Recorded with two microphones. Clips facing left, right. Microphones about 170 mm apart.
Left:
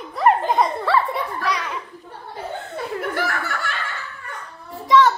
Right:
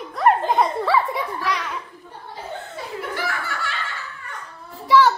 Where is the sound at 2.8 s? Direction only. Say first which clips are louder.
Left 5 dB; 50° left (ahead or behind).